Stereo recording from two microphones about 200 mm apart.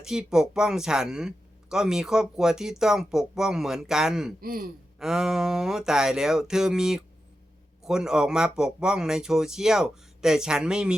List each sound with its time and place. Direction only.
0.0 s speech: 5° right (ahead or behind)
4.4 s a man's voice: 50° right (ahead or behind)
4.9 s speech: centre (ahead or behind)